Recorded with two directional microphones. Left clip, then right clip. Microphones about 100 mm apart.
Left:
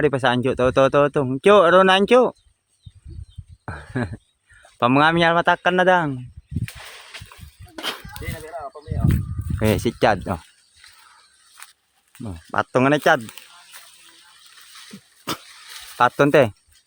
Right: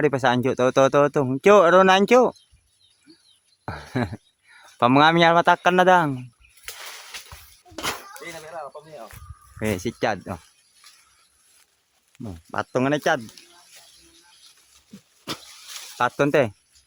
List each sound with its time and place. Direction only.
0.0 s speech: 5° left (ahead or behind)
3.7 s speech: 10° right (ahead or behind)
7.8 s a sound: 20° right (ahead or behind)
9.6 s speech: 65° left (ahead or behind)
12.5 s speech: 35° left (ahead or behind)
15.3 s a sound: 35° left (ahead or behind)
16.0 s speech: 35° left (ahead or behind)